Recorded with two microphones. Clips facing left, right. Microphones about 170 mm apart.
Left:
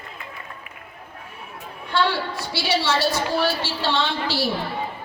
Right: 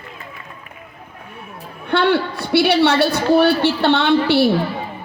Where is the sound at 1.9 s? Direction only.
60° right (ahead or behind).